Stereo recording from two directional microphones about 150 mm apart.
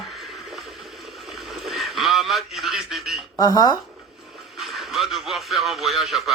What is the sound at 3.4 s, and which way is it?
Speech, 25° left (ahead or behind).